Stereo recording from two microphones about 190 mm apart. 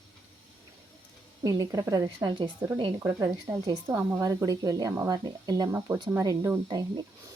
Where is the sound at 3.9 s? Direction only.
15° right (ahead or behind).